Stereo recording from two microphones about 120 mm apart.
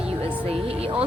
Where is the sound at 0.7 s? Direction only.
55° right (ahead or behind).